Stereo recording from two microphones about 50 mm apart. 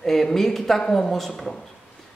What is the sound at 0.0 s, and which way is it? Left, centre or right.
A man's voice, centre.